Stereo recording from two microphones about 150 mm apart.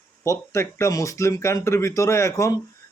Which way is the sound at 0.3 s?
20° left (ahead or behind).